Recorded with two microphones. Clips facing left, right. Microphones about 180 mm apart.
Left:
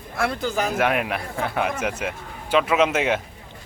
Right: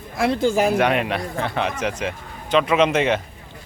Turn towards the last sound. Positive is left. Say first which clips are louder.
# right 2 dB
turn(degrees=5)  # may be behind; listen again after turning